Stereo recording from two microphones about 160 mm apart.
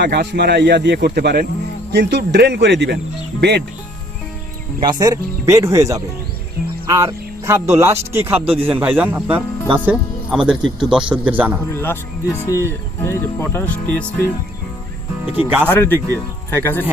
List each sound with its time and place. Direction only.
0.0 s speech: 90° right
4.8 s speech: 25° right (ahead or behind)
11.7 s speech: 15° left (ahead or behind)
15.4 s speech: 10° right (ahead or behind)
15.7 s speech: 15° left (ahead or behind)